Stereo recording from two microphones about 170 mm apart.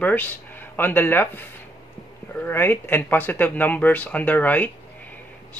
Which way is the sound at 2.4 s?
10° left (ahead or behind).